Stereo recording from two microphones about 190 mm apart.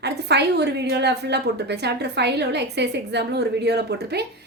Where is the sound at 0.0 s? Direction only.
60° right (ahead or behind).